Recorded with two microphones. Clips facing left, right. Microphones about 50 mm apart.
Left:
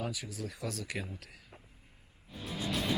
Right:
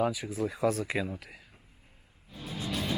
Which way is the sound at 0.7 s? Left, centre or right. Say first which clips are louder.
Right 11 dB; right.